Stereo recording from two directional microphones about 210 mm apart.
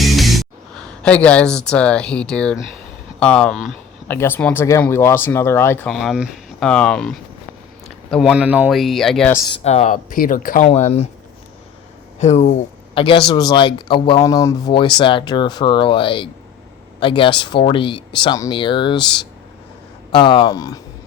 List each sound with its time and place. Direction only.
0.0 s music: centre (ahead or behind)
1.0 s speech: 5° left (ahead or behind)
5.9 s speech: centre (ahead or behind)
9.3 s speech: 15° left (ahead or behind)
9.6 s speech: 35° left (ahead or behind)
12.2 s speech: 35° left (ahead or behind); by 20.8 s 15° left (ahead or behind)